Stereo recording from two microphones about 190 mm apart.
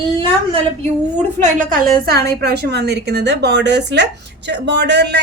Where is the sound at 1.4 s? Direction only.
45° right (ahead or behind).